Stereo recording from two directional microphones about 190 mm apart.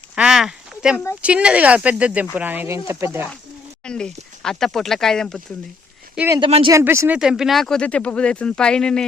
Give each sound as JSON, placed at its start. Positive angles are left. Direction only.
{"t": 0.2, "sound": "a sound", "side_deg": 0}
{"t": 1.2, "sound": "speech", "side_deg": -5}
{"t": 3.8, "sound": "speech", "side_deg": 5}
{"t": 6.1, "sound": "speech", "side_deg": -15}
{"t": 6.4, "sound": "speech", "side_deg": -25}
{"t": 6.7, "sound": "speech", "side_deg": -15}